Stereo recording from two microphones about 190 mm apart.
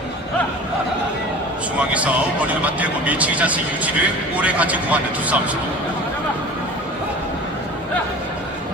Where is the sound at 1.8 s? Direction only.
5° right (ahead or behind).